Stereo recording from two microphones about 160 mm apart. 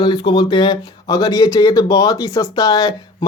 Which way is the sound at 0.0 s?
30° left (ahead or behind).